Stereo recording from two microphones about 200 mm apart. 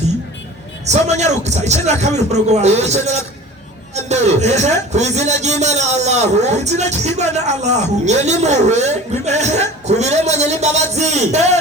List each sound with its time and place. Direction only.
0.9 s a man's voice: 35° right (ahead or behind)